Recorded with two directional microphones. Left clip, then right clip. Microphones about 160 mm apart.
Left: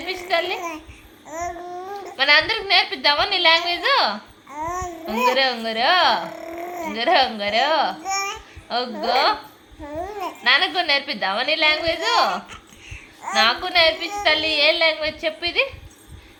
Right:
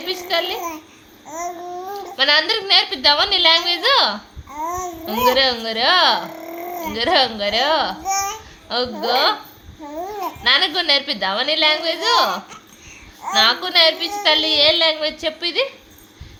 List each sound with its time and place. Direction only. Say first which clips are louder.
0.3 s a child's voice: right 1 dB; 40° right (ahead or behind)
1.3 s babbling: right 1 dB; 10° left (ahead or behind)
2.1 s a woman's voice: right 1 dB; 40° right (ahead or behind)
4.5 s babbling: right 2 dB; 10° left (ahead or behind)
5.0 s a woman's voice: right 3 dB; 40° right (ahead or behind)
6.3 s a sound: right 1 dB; 10° left (ahead or behind)
6.9 s a woman's voice: right 1 dB; 45° right (ahead or behind)
8.0 s babbling: right 3 dB; 5° left (ahead or behind)
8.7 s a woman's voice: right 2 dB; 45° right (ahead or behind)
9.8 s babbling: right 2 dB; 5° left (ahead or behind)
10.4 s a woman's voice: right 2 dB; 40° right (ahead or behind)
12.5 s babbling: even; 10° left (ahead or behind)
13.3 s a woman's voice: right 3 dB; 40° right (ahead or behind)